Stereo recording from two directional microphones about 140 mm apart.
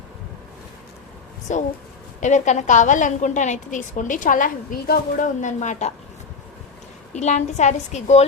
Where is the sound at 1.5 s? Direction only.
55° left (ahead or behind).